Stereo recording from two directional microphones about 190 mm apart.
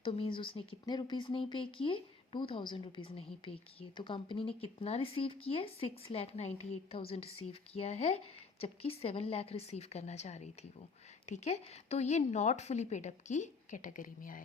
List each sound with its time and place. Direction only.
0.0 s a woman's voice: 25° left (ahead or behind); by 14.4 s 45° left (ahead or behind)